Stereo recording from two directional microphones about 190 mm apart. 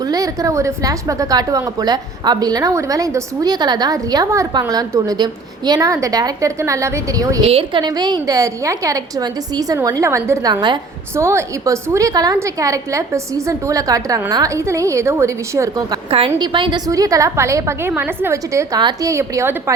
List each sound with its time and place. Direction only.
0.0 s a woman's voice: 20° right (ahead or behind)